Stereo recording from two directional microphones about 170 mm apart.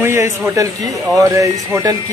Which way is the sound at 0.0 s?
15° right (ahead or behind).